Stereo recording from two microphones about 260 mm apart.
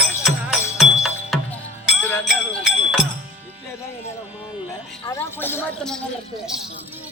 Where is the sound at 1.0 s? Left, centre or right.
Centre.